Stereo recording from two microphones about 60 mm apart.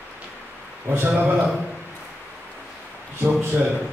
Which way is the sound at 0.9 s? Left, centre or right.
Right.